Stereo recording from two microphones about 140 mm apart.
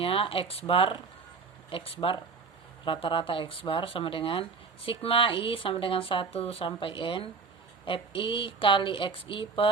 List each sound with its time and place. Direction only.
0.0 s speech: 40° left (ahead or behind)